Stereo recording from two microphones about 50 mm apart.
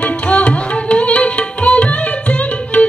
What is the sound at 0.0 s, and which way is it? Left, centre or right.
Music, left.